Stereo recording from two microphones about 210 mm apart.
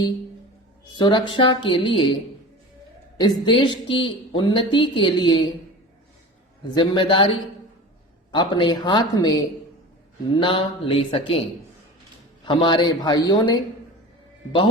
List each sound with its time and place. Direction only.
0.9 s speech: 20° left (ahead or behind)
3.2 s speech: 20° left (ahead or behind)
6.7 s speech: 25° left (ahead or behind)
12.5 s speech: 20° left (ahead or behind)